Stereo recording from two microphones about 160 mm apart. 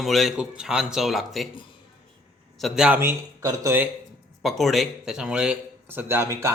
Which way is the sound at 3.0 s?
15° right (ahead or behind).